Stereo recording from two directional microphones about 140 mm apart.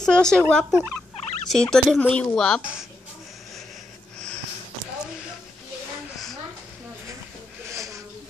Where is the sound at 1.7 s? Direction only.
5° left (ahead or behind).